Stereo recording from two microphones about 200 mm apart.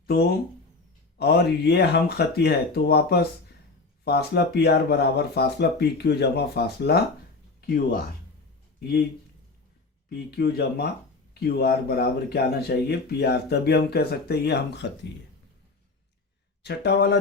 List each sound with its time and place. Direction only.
0.1 s speech: 50° left (ahead or behind)
10.1 s speech: 50° left (ahead or behind)
16.6 s speech: 55° left (ahead or behind)